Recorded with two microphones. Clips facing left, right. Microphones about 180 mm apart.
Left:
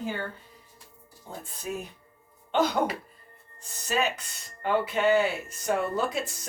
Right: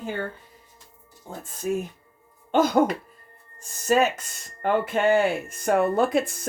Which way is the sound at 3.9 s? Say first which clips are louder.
Right 7 dB; 45° right (ahead or behind).